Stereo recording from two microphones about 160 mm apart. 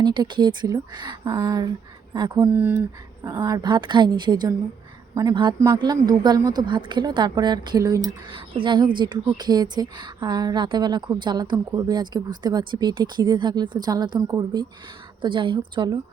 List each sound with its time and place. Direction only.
0.0 s a woman's voice: 30° right (ahead or behind)
2.5 s speech: 10° right (ahead or behind)
3.2 s a woman's voice: 25° right (ahead or behind)
8.3 s a woman's voice: 30° right (ahead or behind)